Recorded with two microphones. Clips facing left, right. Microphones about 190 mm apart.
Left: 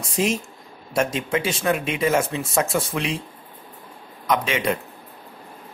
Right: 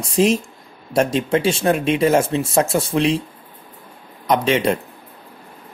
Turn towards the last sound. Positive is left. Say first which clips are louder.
# right 5 dB
turn(degrees=-35)  # may be behind; listen again after turning